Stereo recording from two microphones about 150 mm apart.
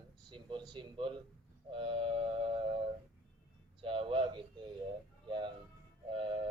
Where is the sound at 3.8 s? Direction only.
35° right (ahead or behind).